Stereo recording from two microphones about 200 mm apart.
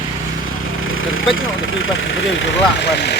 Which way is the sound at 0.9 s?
80° left.